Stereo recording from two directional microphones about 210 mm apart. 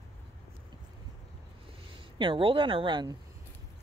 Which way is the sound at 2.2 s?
25° right (ahead or behind).